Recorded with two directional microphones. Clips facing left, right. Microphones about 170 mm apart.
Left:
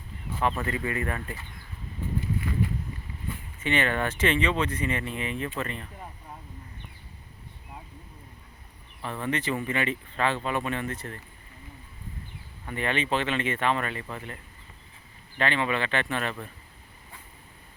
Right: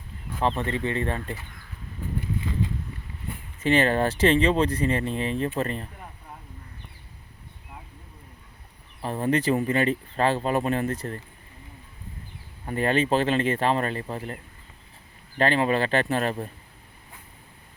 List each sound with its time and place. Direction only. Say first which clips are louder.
0.4 s speech: right 3 dB; 30° right (ahead or behind)
3.6 s speech: right 6 dB; 35° right (ahead or behind)
9.0 s speech: right 6 dB; 35° right (ahead or behind)
12.6 s speech: right 6 dB; 40° right (ahead or behind)
15.4 s speech: right 5 dB; 40° right (ahead or behind)